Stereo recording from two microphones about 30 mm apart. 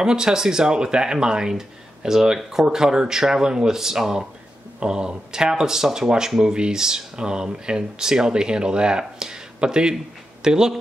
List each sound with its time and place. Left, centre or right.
0.0 s speech: right
4.7 s speech: right